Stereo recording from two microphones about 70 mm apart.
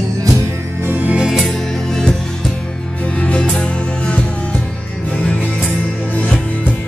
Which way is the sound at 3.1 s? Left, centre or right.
Centre.